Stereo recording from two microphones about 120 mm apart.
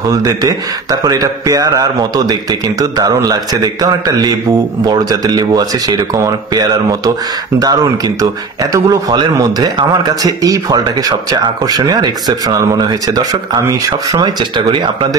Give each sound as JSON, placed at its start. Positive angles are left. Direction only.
{"t": 0.1, "sound": "speech", "side_deg": -30}